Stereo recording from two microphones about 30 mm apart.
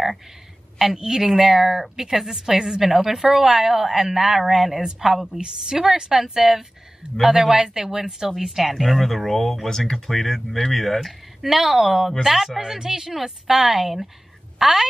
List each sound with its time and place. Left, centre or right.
0.9 s a woman's voice: right
1.2 s a woman's voice: centre
9.7 s speech: centre
11.4 s a woman's voice: centre
12.2 s speech: centre
12.6 s a woman's voice: centre